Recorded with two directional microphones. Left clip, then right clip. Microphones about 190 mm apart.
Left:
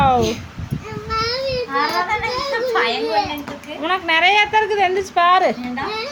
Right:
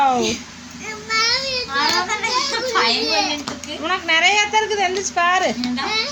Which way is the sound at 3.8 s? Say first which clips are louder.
Left 1 dB; 5° left (ahead or behind).